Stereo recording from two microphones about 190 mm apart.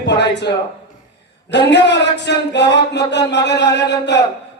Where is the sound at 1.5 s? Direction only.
65° left (ahead or behind).